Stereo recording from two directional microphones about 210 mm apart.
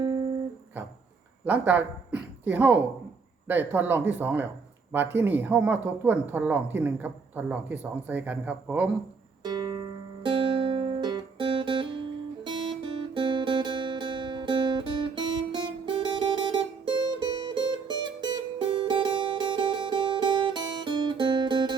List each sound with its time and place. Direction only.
0.0 s guitar: 20° right (ahead or behind)
1.5 s a woman's voice: 10° right (ahead or behind)
9.4 s music: 20° right (ahead or behind)
12.5 s guitar: 20° right (ahead or behind)